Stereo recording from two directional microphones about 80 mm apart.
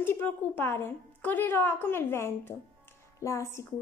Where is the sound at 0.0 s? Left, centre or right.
Left.